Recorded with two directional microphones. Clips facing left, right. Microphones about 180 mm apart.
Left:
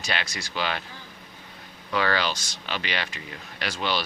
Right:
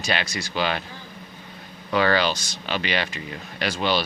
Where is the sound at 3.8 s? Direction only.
40° right (ahead or behind).